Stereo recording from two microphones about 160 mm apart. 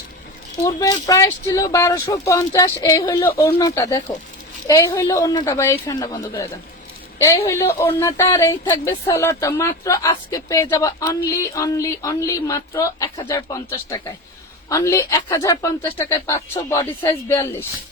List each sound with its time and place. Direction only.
0.6 s speech: 20° left (ahead or behind)